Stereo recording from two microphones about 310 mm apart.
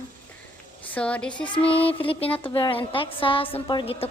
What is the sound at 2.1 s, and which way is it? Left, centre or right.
A woman's voice, centre.